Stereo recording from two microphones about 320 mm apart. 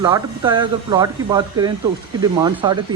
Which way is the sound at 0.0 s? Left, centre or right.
Centre.